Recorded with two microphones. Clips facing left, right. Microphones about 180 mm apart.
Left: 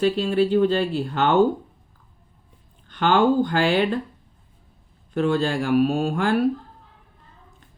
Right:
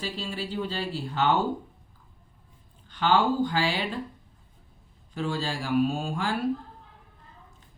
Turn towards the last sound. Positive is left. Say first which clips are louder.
# left 8 dB
turn(degrees=60)  # may be behind; listen again after turning